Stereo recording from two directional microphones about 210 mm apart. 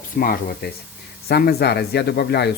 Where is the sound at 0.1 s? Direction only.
40° left (ahead or behind).